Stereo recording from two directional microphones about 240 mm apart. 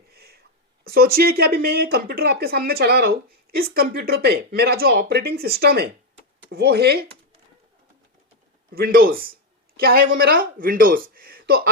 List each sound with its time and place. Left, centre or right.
0.1 s a sound: right
0.9 s speech: right
8.7 s speech: right